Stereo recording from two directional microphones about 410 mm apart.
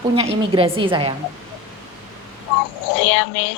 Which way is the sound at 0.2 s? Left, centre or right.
Centre.